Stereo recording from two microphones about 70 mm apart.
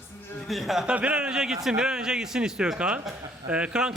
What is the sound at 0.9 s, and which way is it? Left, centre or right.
A man's voice, centre.